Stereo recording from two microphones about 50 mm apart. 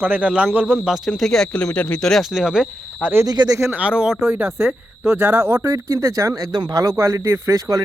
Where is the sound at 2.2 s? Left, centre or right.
Centre.